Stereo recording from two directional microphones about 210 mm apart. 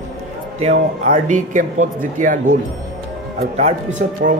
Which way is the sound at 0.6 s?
35° right (ahead or behind).